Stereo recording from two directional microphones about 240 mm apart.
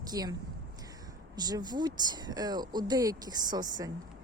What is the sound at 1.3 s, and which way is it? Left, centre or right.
Speech, centre.